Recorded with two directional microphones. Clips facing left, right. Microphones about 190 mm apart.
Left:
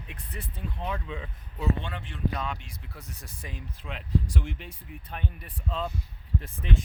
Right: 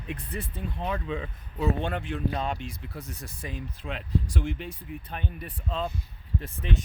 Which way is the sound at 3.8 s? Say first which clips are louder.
Right 4 dB; 45° right (ahead or behind).